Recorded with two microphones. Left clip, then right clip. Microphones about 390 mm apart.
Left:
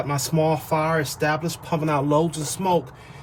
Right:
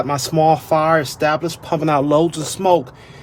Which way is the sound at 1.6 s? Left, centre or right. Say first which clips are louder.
Right 6 dB; centre.